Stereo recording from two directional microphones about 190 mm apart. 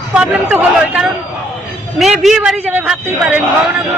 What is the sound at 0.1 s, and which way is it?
A man's voice, 5° right (ahead or behind).